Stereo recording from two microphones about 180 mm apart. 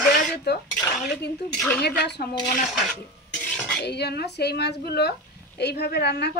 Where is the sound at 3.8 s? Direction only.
65° left (ahead or behind).